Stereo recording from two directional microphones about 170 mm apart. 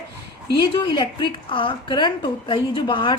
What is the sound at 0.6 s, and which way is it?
A woman's voice, 25° left (ahead or behind).